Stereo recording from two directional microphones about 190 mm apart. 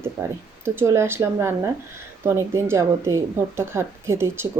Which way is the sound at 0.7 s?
15° right (ahead or behind).